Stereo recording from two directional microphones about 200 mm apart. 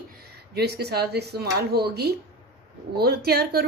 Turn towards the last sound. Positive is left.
turn(degrees=-50)  # may be behind; listen again after turning